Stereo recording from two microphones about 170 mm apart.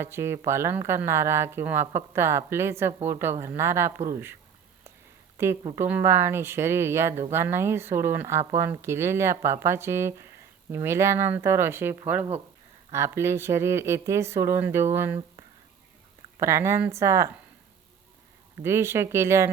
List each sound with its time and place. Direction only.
0.0 s speech: 15° right (ahead or behind)
5.4 s speech: 15° right (ahead or behind)
16.4 s speech: 15° right (ahead or behind)
18.6 s speech: 15° right (ahead or behind)